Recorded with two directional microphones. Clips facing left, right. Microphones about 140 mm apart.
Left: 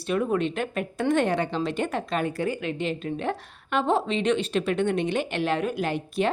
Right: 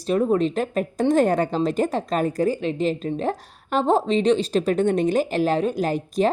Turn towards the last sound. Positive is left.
turn(degrees=-40)  # may be behind; listen again after turning